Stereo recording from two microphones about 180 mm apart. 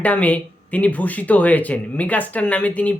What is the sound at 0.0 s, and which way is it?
Speech, 10° left (ahead or behind).